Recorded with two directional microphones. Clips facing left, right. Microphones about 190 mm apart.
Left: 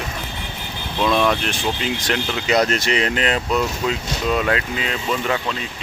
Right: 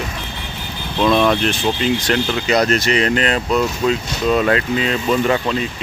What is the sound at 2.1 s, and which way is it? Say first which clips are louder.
Speech: left 1 dB; 20° left (ahead or behind).